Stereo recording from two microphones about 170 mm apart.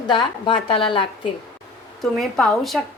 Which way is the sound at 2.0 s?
Centre (ahead or behind).